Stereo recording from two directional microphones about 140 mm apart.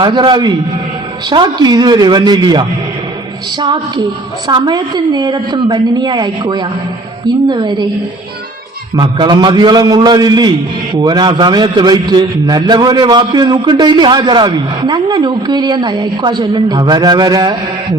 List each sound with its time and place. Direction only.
0.0 s a man's voice: 35° right (ahead or behind)
9.0 s a man's voice: 30° right (ahead or behind)